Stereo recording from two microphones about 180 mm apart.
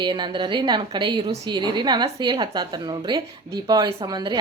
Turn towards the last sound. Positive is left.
turn(degrees=-25)  # may be behind; listen again after turning